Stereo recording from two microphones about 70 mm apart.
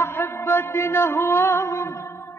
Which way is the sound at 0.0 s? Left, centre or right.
Left.